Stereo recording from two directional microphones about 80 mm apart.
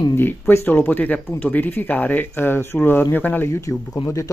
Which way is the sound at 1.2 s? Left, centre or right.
Left.